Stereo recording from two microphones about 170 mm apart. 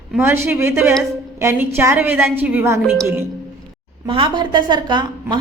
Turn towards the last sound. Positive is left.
turn(degrees=-25)  # may be behind; listen again after turning